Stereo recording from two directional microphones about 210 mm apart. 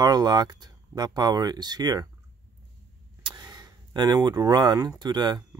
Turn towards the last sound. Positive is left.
turn(degrees=-20)  # may be behind; listen again after turning